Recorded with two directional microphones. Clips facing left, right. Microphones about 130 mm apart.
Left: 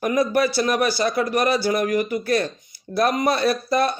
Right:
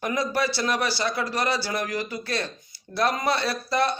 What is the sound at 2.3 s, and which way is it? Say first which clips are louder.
Speech: left 8 dB; 25° right (ahead or behind).